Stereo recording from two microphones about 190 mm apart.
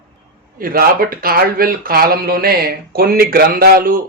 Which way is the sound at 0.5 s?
50° right (ahead or behind).